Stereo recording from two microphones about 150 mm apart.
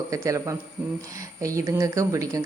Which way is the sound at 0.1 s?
20° right (ahead or behind).